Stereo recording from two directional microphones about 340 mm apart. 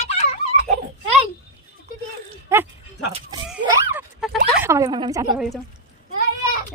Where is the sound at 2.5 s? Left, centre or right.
Centre.